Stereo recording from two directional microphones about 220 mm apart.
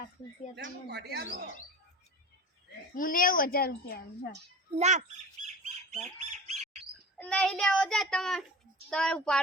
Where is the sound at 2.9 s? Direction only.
40° left (ahead or behind).